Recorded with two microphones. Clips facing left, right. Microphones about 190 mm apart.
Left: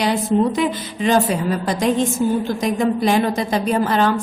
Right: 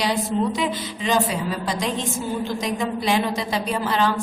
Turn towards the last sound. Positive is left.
turn(degrees=50)  # may be behind; listen again after turning